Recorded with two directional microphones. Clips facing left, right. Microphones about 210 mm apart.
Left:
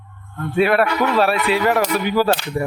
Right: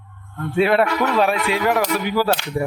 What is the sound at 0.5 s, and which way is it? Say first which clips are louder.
A man's voice: even; 25° right (ahead or behind).